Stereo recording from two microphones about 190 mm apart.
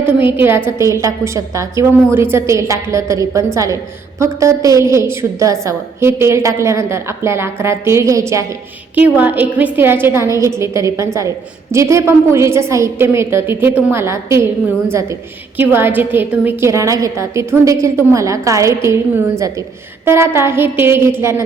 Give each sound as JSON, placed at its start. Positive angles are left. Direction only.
{"t": 0.3, "sound": "a woman's voice", "side_deg": -10}
{"t": 15.5, "sound": "a woman's voice", "side_deg": -10}